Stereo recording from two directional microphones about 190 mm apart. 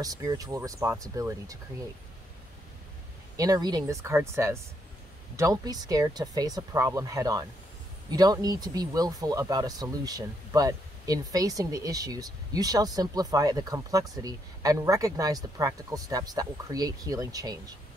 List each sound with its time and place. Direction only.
0.0 s speech: 20° right (ahead or behind)
3.3 s speech: 20° right (ahead or behind)